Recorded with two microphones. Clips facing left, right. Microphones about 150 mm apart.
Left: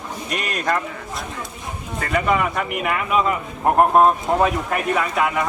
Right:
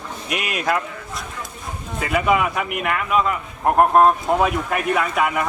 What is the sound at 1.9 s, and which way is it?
A man's voice, 5° right (ahead or behind).